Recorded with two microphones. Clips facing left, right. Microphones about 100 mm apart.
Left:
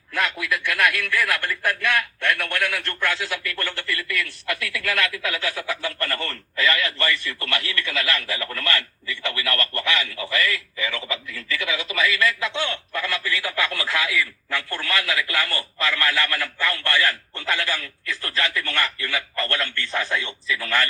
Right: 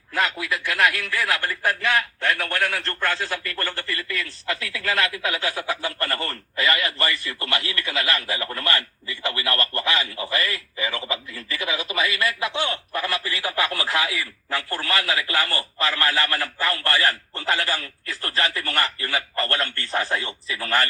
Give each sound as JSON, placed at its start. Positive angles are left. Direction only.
{"t": 0.1, "sound": "a man's voice", "side_deg": -30}